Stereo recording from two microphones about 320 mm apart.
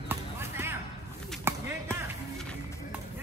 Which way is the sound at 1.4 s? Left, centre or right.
Centre.